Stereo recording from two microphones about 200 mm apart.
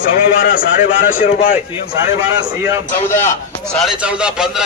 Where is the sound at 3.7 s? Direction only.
Centre (ahead or behind).